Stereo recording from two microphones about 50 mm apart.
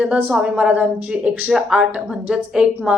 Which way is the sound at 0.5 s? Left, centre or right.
Right.